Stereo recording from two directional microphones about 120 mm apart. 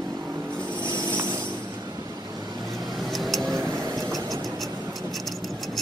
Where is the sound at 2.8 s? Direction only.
Centre (ahead or behind).